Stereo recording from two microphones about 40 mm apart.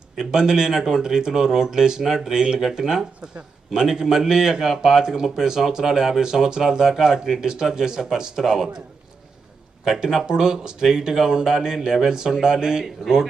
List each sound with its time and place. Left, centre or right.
0.2 s speech: centre
9.8 s speech: centre